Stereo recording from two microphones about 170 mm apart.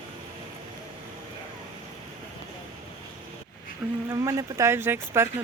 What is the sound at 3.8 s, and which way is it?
Speech, 5° right (ahead or behind).